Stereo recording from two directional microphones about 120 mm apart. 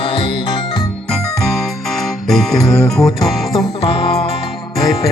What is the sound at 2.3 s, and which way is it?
Music, 5° left (ahead or behind).